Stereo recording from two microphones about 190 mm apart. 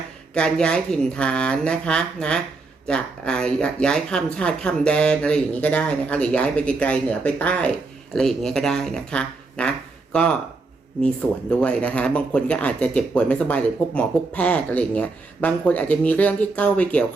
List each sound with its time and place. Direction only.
0.3 s speech: 5° left (ahead or behind)